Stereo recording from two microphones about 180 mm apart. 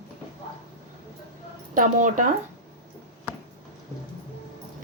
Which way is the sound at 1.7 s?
45° right (ahead or behind).